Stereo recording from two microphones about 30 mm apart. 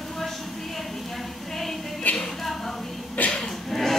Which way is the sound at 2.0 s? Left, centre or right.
Left.